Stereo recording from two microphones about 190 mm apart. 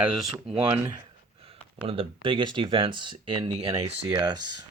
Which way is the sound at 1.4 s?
30° right (ahead or behind).